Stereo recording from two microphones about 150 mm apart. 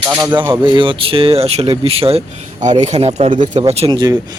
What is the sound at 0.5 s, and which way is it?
Speech, 35° right (ahead or behind).